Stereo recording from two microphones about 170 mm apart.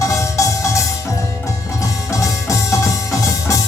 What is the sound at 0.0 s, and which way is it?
Music, 20° left (ahead or behind).